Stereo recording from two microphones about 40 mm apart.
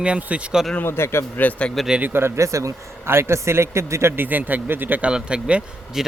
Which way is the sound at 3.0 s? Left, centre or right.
Right.